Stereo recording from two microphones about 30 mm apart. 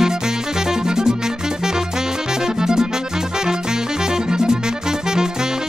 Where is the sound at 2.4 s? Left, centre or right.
Right.